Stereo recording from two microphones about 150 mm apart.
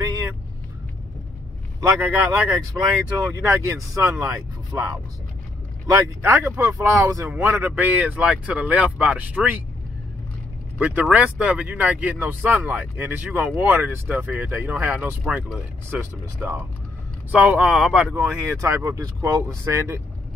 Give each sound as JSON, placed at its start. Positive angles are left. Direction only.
{"t": 1.8, "sound": "speech", "side_deg": -15}
{"t": 6.2, "sound": "speech", "side_deg": -20}
{"t": 10.8, "sound": "speech", "side_deg": -10}
{"t": 18.1, "sound": "speech", "side_deg": -20}